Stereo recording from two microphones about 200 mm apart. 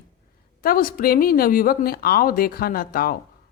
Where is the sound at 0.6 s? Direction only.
45° left (ahead or behind).